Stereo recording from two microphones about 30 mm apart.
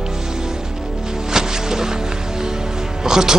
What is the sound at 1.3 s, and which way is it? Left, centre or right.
Music, centre.